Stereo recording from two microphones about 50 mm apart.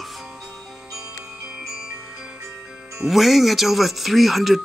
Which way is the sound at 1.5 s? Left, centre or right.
Centre.